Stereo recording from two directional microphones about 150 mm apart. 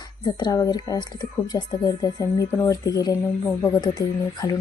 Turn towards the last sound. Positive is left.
turn(degrees=25)  # may be behind; listen again after turning